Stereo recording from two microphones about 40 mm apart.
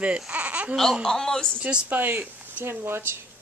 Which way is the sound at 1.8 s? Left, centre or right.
Right.